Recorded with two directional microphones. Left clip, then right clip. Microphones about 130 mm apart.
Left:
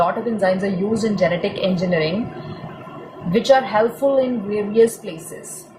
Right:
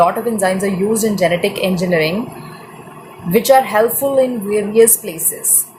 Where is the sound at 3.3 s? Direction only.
50° right (ahead or behind).